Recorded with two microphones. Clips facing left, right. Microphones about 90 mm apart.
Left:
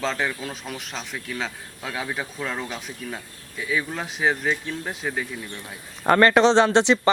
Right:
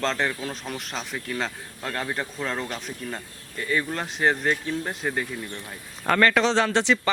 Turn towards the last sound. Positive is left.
turn(degrees=20)  # may be behind; listen again after turning